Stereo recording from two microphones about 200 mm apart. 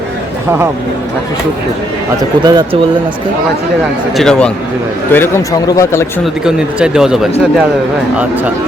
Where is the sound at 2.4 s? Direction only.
20° right (ahead or behind).